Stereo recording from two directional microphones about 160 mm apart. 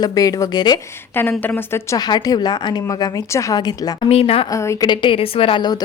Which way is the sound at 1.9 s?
25° left (ahead or behind).